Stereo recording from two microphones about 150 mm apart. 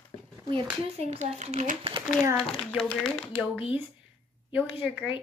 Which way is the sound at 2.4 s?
Centre (ahead or behind).